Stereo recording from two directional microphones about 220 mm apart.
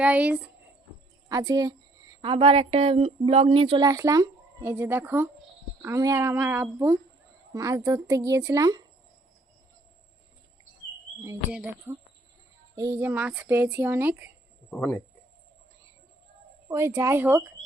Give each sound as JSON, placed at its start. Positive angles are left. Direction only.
{"t": 0.0, "sound": "speech", "side_deg": -5}
{"t": 11.2, "sound": "speech", "side_deg": -10}
{"t": 14.7, "sound": "speech", "side_deg": 5}
{"t": 16.6, "sound": "speech", "side_deg": -10}